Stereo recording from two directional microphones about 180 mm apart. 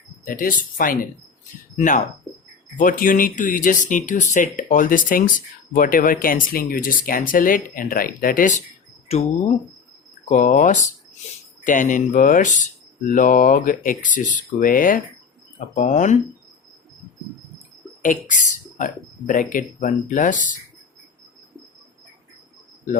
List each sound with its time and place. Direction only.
0.3 s speech: 50° left (ahead or behind)
10.2 s speech: 40° left (ahead or behind)
18.0 s speech: 45° left (ahead or behind)